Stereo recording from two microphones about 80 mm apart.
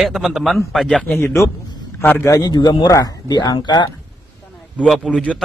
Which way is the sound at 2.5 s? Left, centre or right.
Left.